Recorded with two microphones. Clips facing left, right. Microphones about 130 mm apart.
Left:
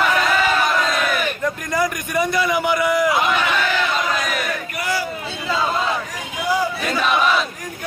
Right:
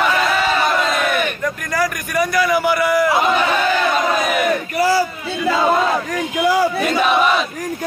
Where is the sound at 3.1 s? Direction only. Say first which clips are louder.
Right 3 dB; 30° right (ahead or behind).